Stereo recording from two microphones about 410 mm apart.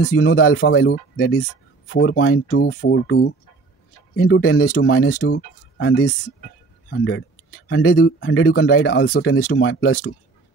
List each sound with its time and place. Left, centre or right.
0.0 s speech: left